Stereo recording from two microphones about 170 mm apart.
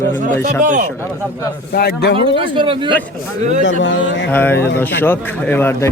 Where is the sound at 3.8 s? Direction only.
90° left.